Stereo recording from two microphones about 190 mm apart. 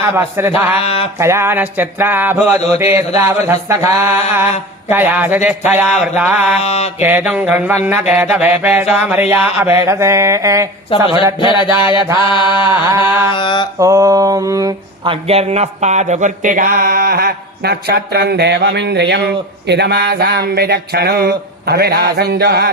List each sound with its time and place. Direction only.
0.0 s mantra: 10° right (ahead or behind)
0.8 s mantra: 30° left (ahead or behind)
1.2 s mantra: 15° right (ahead or behind)
6.6 s mantra: 35° left (ahead or behind)
7.0 s mantra: 10° right (ahead or behind)
10.9 s a sound: 25° left (ahead or behind)
13.7 s a sound: 15° right (ahead or behind); by 22.7 s 55° right (ahead or behind)